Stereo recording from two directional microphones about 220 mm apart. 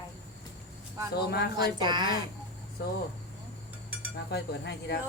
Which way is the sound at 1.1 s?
45° left (ahead or behind).